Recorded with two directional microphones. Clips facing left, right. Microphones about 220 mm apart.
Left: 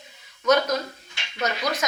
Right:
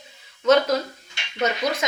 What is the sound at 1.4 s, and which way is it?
Speech, 25° right (ahead or behind).